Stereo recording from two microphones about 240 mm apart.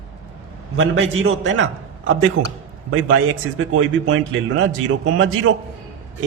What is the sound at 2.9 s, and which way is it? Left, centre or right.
Speech, right.